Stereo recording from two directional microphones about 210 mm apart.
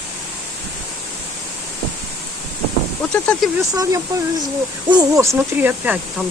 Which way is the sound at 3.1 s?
5° left (ahead or behind).